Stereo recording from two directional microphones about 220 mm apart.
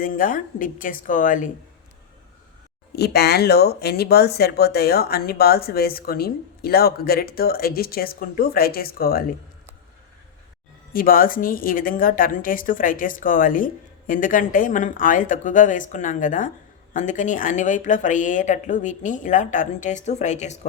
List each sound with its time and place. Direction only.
0.0 s a woman's voice: 40° left (ahead or behind)
2.9 s speech: 50° left (ahead or behind)
10.9 s a woman's voice: 40° left (ahead or behind)